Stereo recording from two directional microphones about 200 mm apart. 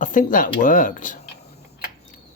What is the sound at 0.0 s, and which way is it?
Speech, 40° left (ahead or behind).